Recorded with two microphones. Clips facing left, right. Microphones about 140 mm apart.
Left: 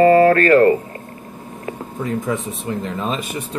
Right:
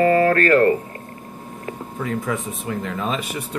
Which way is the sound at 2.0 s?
30° left (ahead or behind).